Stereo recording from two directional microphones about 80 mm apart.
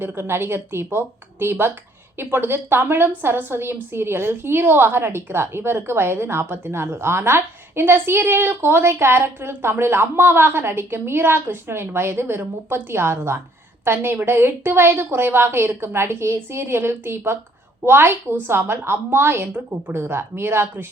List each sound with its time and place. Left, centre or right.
0.0 s a woman's voice: right